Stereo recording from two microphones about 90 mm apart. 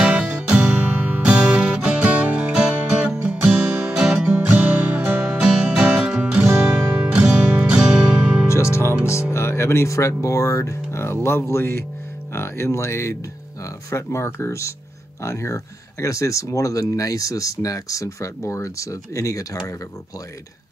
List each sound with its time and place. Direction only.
0.3 s music: 15° right (ahead or behind)
8.5 s music: 30° left (ahead or behind)
11.2 s speech: 30° left (ahead or behind)